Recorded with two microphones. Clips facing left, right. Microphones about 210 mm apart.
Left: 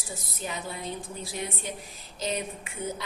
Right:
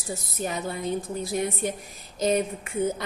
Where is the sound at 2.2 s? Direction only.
50° right (ahead or behind).